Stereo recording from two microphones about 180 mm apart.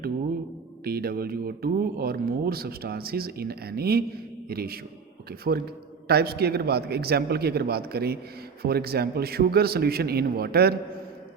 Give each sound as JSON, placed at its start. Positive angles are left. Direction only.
{"t": 0.9, "sound": "speech", "side_deg": -55}